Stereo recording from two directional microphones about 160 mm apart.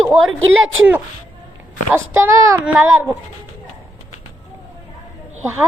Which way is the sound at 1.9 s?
15° right (ahead or behind).